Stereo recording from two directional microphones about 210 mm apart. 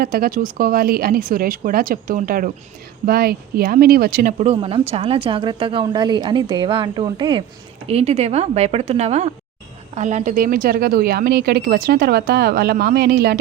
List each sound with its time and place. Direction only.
0.0 s a woman's voice: 45° right (ahead or behind)